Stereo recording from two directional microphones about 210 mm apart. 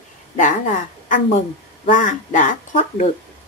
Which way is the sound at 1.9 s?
40° left (ahead or behind).